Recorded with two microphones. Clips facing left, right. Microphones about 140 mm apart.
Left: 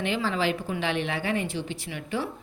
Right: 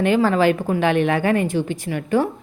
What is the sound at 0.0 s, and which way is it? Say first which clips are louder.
A woman's voice: right 10 dB; 50° right (ahead or behind).